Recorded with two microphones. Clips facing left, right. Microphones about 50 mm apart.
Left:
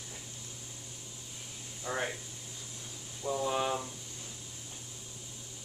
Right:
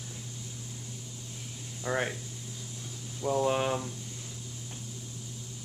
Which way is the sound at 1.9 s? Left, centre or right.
Right.